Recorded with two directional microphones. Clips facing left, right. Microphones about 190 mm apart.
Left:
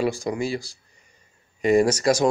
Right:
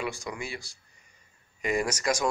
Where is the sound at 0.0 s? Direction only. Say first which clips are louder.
Left 10 dB; 35° left (ahead or behind).